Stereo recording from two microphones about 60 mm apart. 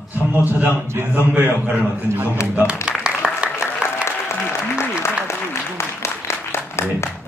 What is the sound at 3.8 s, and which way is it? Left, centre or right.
Applause, left.